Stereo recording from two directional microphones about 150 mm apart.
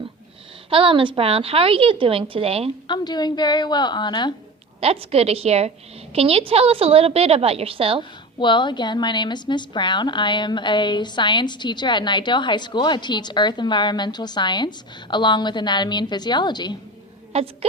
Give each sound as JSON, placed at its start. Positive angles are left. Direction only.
{"t": 0.7, "sound": "a woman's voice", "side_deg": -35}
{"t": 2.8, "sound": "a woman's voice", "side_deg": 30}
{"t": 4.8, "sound": "a woman's voice", "side_deg": -40}
{"t": 8.4, "sound": "a woman's voice", "side_deg": 30}
{"t": 17.3, "sound": "a woman's voice", "side_deg": -45}